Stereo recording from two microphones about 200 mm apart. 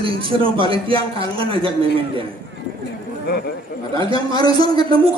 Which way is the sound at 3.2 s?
55° left (ahead or behind).